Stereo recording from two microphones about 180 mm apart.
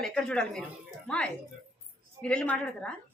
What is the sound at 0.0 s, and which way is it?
A woman's voice, 5° left (ahead or behind).